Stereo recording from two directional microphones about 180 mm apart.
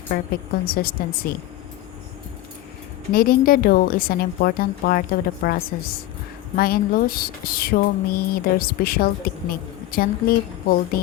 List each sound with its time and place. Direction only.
0.1 s speech: 55° left (ahead or behind)
3.1 s speech: 55° left (ahead or behind)